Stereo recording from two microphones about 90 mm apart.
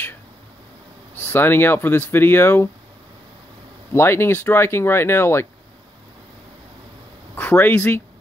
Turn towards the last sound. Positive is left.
turn(degrees=20)  # may be behind; listen again after turning